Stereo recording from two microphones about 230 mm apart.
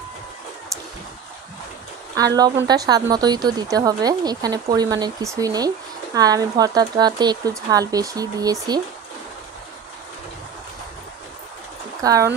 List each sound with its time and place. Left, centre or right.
2.1 s a woman's voice: centre
12.0 s speech: centre